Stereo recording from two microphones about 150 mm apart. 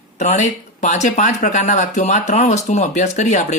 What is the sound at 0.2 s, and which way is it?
Speech, 55° left (ahead or behind).